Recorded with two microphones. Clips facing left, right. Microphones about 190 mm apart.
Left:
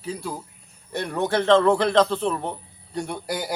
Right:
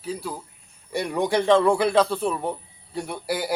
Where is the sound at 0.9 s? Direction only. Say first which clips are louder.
Right 1 dB; 10° right (ahead or behind).